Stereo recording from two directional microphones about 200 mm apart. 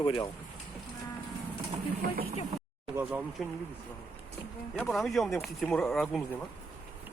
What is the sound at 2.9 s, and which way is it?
Speech, 10° right (ahead or behind).